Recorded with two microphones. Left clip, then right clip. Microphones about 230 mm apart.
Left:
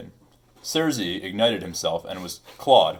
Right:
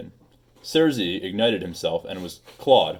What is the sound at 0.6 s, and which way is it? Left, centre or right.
Speech, right.